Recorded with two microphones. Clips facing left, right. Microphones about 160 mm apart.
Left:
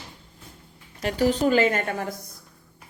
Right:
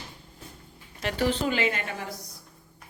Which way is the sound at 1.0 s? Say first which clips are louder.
Left 5 dB; 40° left (ahead or behind).